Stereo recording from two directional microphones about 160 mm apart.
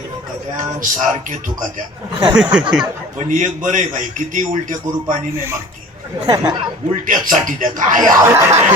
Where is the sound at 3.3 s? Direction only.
55° right (ahead or behind).